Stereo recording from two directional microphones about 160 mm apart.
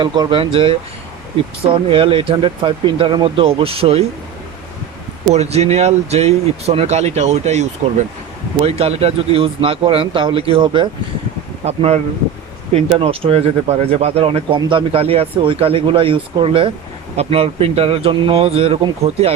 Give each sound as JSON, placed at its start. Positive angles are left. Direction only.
{"t": 0.0, "sound": "speech", "side_deg": -30}
{"t": 5.3, "sound": "speech", "side_deg": -45}